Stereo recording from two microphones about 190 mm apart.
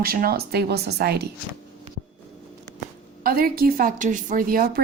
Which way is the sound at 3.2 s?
50° right (ahead or behind).